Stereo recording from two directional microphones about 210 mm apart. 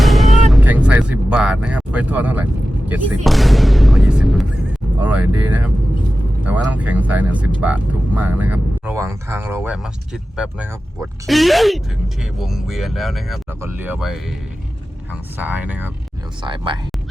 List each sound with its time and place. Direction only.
0.0 s vehicle: centre (ahead or behind)
3.2 s speech: centre (ahead or behind)
16.4 s speech: 20° right (ahead or behind)